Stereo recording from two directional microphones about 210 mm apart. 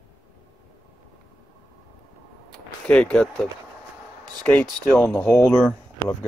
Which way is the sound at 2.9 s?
5° left (ahead or behind).